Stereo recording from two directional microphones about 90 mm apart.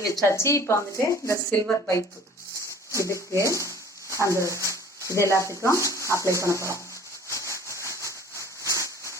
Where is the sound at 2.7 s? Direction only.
35° left (ahead or behind).